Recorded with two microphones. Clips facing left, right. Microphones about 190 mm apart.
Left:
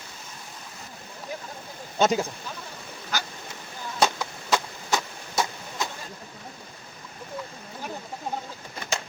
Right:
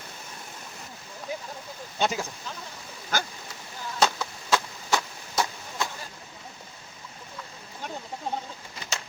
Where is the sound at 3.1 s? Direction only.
50° right (ahead or behind).